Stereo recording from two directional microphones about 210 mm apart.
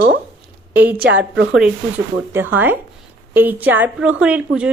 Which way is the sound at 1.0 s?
55° right (ahead or behind).